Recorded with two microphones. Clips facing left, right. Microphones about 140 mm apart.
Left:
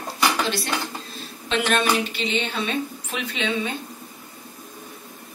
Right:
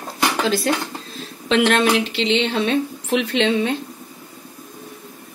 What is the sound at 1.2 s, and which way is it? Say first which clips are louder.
Speech: right 8 dB; 90° right.